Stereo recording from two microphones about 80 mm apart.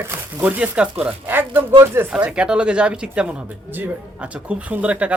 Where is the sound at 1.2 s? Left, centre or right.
Right.